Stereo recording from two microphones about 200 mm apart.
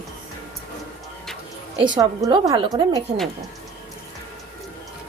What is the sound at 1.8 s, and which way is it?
A woman's voice, 20° right (ahead or behind).